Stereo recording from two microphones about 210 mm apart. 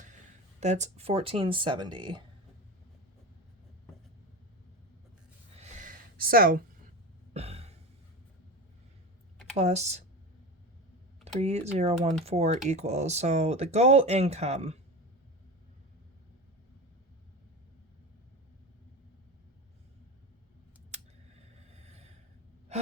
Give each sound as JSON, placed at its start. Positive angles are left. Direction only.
{"t": 0.6, "sound": "speech", "side_deg": -35}
{"t": 5.5, "sound": "a sound", "side_deg": -40}
{"t": 7.3, "sound": "a sound", "side_deg": -30}
{"t": 9.6, "sound": "speech", "side_deg": -30}
{"t": 11.3, "sound": "speech", "side_deg": -30}
{"t": 21.8, "sound": "snort", "side_deg": -30}